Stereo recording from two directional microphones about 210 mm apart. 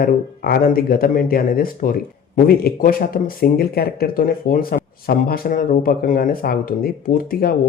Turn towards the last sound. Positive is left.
turn(degrees=45)  # may be behind; listen again after turning